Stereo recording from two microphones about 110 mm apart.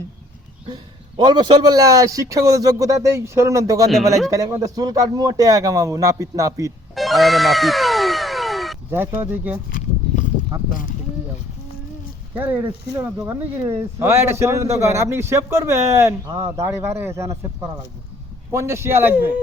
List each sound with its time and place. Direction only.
0.7 s a man's voice: 45° right (ahead or behind)
6.9 s music: centre (ahead or behind)
8.9 s a man's voice: 25° right (ahead or behind)
12.4 s a man's voice: 15° right (ahead or behind)